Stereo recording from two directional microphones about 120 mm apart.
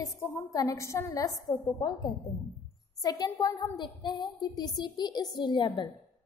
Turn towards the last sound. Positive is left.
turn(degrees=40)  # may be behind; listen again after turning